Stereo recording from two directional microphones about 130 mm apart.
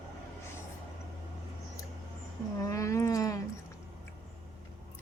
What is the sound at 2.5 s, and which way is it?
Speech, 25° left (ahead or behind).